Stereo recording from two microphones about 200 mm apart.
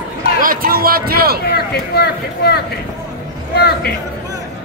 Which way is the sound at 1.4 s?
55° left (ahead or behind).